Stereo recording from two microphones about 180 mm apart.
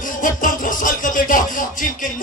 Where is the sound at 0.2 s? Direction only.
45° left (ahead or behind).